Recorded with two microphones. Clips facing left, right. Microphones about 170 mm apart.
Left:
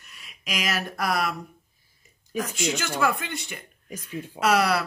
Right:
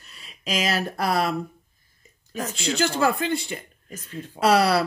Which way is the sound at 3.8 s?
10° left (ahead or behind).